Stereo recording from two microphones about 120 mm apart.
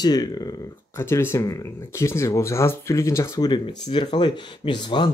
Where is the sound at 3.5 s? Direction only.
40° left (ahead or behind).